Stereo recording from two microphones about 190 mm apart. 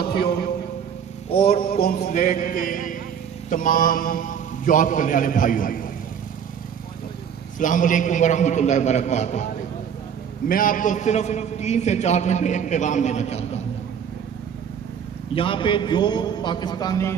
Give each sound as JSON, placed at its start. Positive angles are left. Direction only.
{"t": 0.0, "sound": "a sound", "side_deg": 55}
{"t": 1.3, "sound": "mantra", "side_deg": 30}
{"t": 1.8, "sound": "a man's voice", "side_deg": 50}
{"t": 7.5, "sound": "a man's voice", "side_deg": 45}
{"t": 10.5, "sound": "a man's voice", "side_deg": 45}
{"t": 15.3, "sound": "a man's voice", "side_deg": 25}